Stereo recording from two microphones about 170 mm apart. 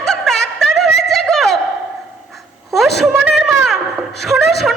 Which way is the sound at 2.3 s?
Centre (ahead or behind).